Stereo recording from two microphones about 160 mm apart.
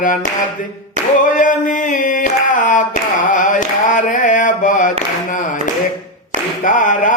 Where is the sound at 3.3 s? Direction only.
55° left (ahead or behind).